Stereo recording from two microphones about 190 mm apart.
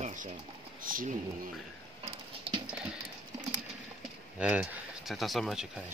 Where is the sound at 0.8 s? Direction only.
45° right (ahead or behind).